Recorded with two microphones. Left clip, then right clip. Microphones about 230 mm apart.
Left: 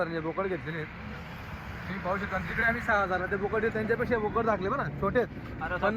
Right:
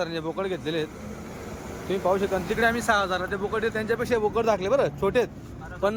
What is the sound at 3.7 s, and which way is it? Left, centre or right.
Speech, right.